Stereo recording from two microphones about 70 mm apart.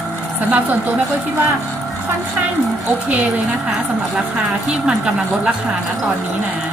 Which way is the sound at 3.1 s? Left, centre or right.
Right.